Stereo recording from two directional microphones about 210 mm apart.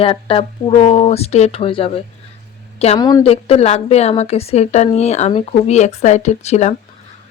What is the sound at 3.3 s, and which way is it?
A woman's voice, 30° left (ahead or behind).